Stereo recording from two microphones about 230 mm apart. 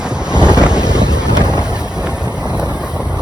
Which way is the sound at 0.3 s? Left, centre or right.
Centre.